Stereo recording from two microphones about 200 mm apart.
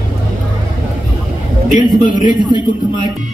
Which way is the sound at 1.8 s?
20° left (ahead or behind).